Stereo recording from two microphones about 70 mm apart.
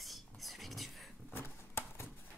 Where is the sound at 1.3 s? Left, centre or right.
Left.